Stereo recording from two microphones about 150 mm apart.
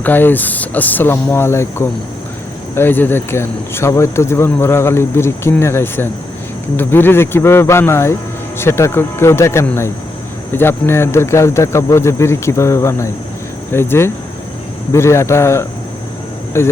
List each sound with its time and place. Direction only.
0.0 s speech: 15° left (ahead or behind)